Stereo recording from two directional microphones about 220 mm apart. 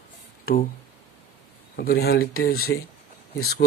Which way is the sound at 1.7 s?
45° left (ahead or behind).